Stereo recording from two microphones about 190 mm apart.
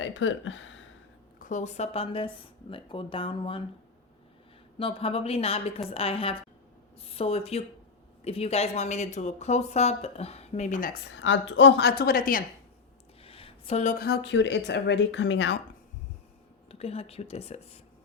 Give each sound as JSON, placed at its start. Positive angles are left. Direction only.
{"t": 0.0, "sound": "speech", "side_deg": 85}
{"t": 1.4, "sound": "speech", "side_deg": 40}
{"t": 4.8, "sound": "speech", "side_deg": 30}
{"t": 11.2, "sound": "speech", "side_deg": 75}
{"t": 13.2, "sound": "speech", "side_deg": 30}
{"t": 16.7, "sound": "speech", "side_deg": 30}